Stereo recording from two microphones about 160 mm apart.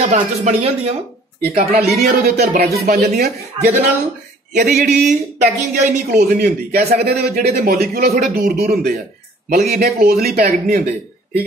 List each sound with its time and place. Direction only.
0.0 s speech: 45° right (ahead or behind)
1.5 s a man's voice: 75° right (ahead or behind)
4.5 s a sound: 50° right (ahead or behind)
4.8 s speech: 50° right (ahead or behind)
6.1 s a man's voice: 70° right (ahead or behind)